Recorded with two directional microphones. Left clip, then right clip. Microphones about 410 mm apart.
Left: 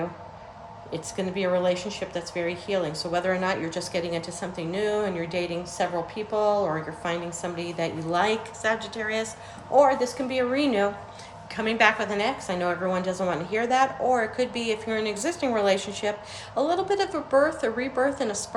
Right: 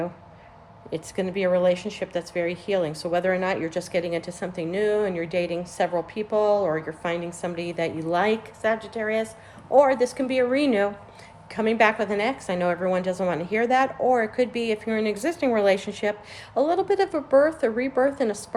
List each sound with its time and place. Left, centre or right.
0.9 s speech: centre